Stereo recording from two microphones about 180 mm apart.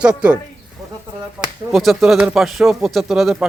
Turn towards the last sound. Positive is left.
turn(degrees=-5)  # may be behind; listen again after turning